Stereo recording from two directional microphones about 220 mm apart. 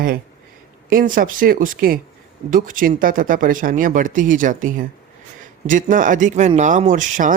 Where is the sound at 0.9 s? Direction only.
40° right (ahead or behind).